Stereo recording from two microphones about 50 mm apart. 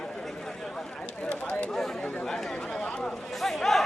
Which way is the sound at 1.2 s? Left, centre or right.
Left.